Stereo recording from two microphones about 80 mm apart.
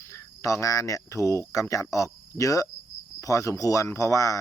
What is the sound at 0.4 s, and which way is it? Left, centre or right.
Speech, left.